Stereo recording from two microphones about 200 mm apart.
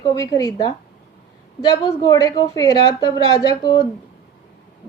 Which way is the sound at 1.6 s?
20° left (ahead or behind).